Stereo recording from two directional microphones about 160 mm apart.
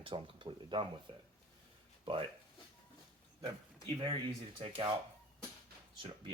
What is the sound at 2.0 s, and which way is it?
Speech, 35° right (ahead or behind).